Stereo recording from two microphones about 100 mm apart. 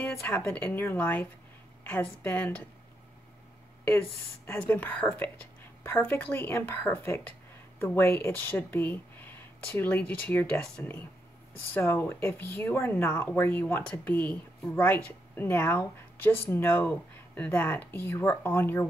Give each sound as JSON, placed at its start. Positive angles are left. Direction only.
{"t": 0.0, "sound": "speech", "side_deg": 20}
{"t": 2.2, "sound": "speech", "side_deg": 15}
{"t": 4.5, "sound": "a woman's voice", "side_deg": 15}